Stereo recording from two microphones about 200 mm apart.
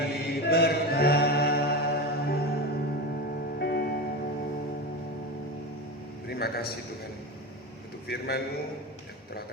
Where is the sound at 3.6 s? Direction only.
55° left (ahead or behind).